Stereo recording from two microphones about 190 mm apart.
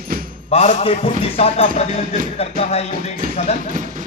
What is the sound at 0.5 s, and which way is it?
Speech, 30° left (ahead or behind).